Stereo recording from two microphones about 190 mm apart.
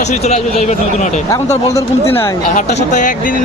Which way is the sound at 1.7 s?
10° left (ahead or behind).